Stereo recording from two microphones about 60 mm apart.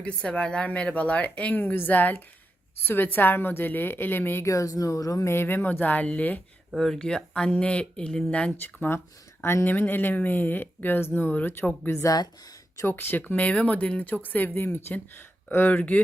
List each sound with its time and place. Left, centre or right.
0.0 s speech: centre; by 4.4 s left
4.4 s speech: left
5.2 s speech: left
6.7 s speech: centre
8.6 s speech: left
9.6 s speech: left
12.0 s speech: left
12.8 s speech: left
15.5 s speech: left